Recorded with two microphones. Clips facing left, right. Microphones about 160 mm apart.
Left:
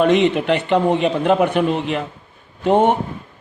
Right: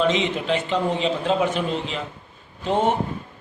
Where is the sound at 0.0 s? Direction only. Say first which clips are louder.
Left 7 dB; 60° left (ahead or behind).